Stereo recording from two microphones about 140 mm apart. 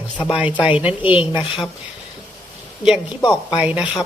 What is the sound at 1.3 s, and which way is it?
Speech, 35° left (ahead or behind).